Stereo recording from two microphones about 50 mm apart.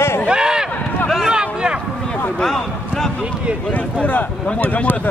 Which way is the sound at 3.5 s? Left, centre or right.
Right.